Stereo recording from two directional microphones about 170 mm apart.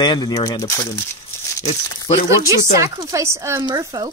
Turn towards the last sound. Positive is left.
turn(degrees=-25)  # may be behind; listen again after turning